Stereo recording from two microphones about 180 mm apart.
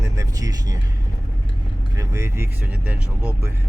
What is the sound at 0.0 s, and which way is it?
Vehicle, 20° right (ahead or behind).